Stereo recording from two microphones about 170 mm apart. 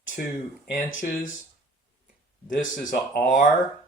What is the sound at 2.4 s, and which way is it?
Speech, 50° left (ahead or behind).